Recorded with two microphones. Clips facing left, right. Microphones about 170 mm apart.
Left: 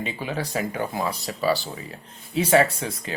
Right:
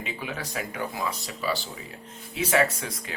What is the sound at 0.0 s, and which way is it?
Speech, 30° left (ahead or behind).